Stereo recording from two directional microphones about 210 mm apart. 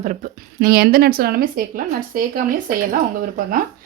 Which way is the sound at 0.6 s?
45° right (ahead or behind).